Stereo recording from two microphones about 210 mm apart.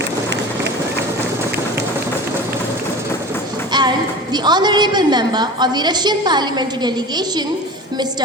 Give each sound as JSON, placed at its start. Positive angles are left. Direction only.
{"t": 3.7, "sound": "a woman's voice", "side_deg": -20}